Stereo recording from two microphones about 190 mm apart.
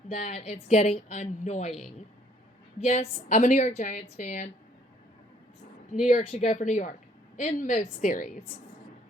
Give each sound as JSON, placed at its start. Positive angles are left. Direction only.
{"t": 0.1, "sound": "a woman's voice", "side_deg": 35}
{"t": 5.9, "sound": "a woman's voice", "side_deg": 40}